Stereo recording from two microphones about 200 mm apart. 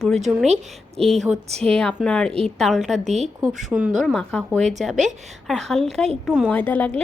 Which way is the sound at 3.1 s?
35° right (ahead or behind).